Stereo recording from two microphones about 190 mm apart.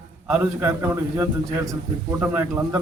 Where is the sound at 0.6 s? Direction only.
15° right (ahead or behind).